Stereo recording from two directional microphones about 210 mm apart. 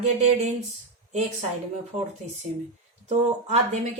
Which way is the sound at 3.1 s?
30° right (ahead or behind).